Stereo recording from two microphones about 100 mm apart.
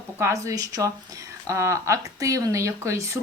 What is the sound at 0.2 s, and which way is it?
Speech, 30° right (ahead or behind).